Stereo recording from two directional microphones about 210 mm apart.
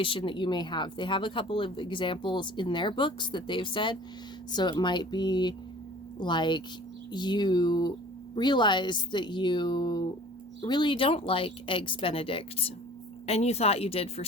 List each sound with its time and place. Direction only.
0.0 s speech: 25° left (ahead or behind)